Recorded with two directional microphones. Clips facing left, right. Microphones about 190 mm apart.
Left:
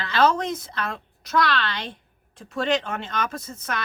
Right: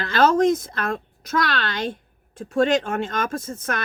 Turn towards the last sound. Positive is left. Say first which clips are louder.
# right 4 dB
turn(degrees=-50)  # may be behind; listen again after turning